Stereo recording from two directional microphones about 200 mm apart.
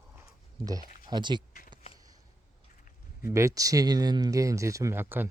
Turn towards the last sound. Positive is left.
turn(degrees=-10)  # may be behind; listen again after turning